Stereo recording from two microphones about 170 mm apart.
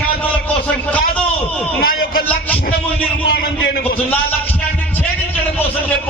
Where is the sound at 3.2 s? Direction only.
65° left (ahead or behind).